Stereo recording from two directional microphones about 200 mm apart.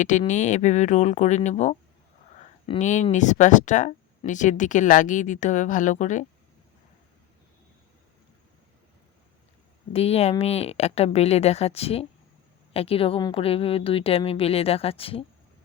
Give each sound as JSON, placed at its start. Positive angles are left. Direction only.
{"t": 0.0, "sound": "speech", "side_deg": 40}
{"t": 9.9, "sound": "a woman's voice", "side_deg": 30}